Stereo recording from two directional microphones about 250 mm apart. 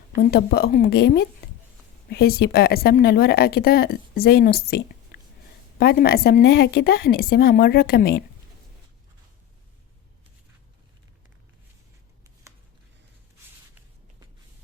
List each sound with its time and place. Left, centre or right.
0.2 s a woman's voice: left
5.8 s a woman's voice: left